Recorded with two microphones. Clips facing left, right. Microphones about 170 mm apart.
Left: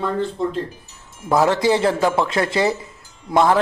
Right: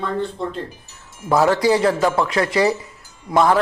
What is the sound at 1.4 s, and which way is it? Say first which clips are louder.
A man's voice: right 1 dB; 25° left (ahead or behind).